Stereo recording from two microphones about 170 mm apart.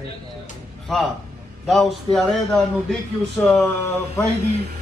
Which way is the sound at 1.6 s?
Centre (ahead or behind).